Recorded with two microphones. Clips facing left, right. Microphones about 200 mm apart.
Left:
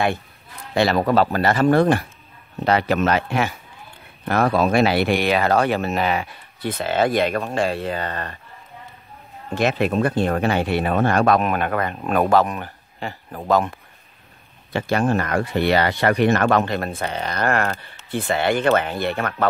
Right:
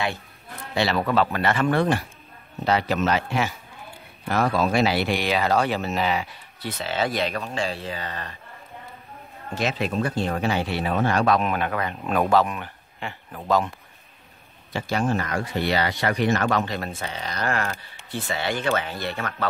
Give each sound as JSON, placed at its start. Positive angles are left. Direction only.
{"t": 0.7, "sound": "speech", "side_deg": 45}
{"t": 2.6, "sound": "speech", "side_deg": 60}
{"t": 9.6, "sound": "speech", "side_deg": 55}